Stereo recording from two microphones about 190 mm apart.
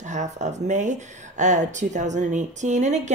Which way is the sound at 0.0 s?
40° right (ahead or behind).